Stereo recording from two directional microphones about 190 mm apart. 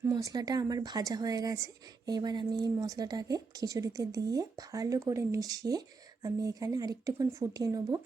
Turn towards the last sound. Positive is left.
turn(degrees=-20)  # may be behind; listen again after turning